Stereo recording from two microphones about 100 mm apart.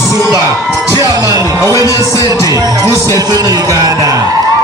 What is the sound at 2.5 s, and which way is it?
Music, 40° right (ahead or behind).